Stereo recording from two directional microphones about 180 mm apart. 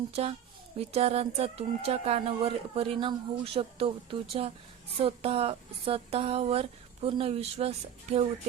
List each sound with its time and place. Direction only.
0.8 s speech: 35° right (ahead or behind)